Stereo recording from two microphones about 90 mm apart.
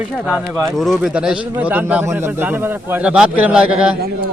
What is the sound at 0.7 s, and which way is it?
Speech, centre (ahead or behind).